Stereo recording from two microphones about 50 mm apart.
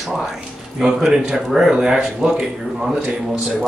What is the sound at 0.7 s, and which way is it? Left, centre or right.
A man's voice, centre.